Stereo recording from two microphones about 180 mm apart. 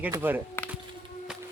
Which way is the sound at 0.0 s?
10° right (ahead or behind).